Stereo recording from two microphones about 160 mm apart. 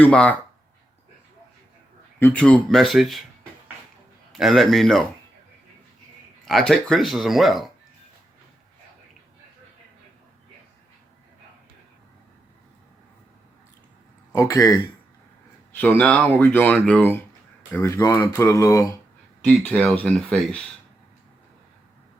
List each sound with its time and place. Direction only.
0.0 s speech: 10° left (ahead or behind)
2.1 s speech: 10° left (ahead or behind)
4.3 s speech: centre (ahead or behind)
6.4 s speech: centre (ahead or behind)
14.3 s speech: 20° left (ahead or behind)
15.7 s speech: 10° left (ahead or behind)
19.5 s speech: 5° left (ahead or behind)